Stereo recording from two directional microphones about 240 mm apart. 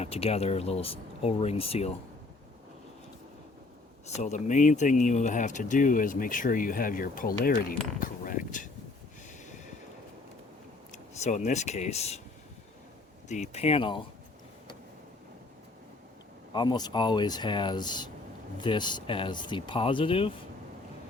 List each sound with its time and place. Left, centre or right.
0.0 s speech: left
4.1 s speech: left
10.9 s speech: left
13.2 s speech: left
16.5 s speech: centre